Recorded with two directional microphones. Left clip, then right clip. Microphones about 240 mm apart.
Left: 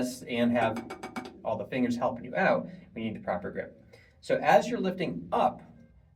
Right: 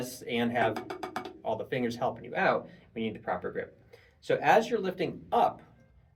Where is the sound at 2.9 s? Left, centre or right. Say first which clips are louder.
Even; centre.